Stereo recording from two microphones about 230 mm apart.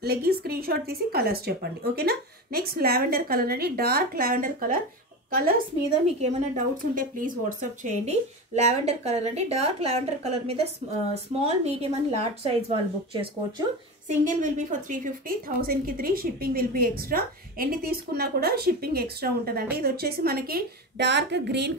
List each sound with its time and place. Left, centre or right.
0.0 s speech: right